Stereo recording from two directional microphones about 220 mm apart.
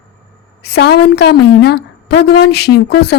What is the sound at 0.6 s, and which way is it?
A woman's voice, 50° left (ahead or behind).